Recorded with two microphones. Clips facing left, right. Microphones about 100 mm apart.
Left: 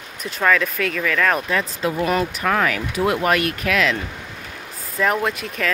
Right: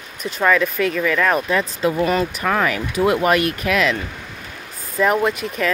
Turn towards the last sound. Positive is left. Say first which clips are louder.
# right 3 dB
turn(degrees=-5)  # may be behind; listen again after turning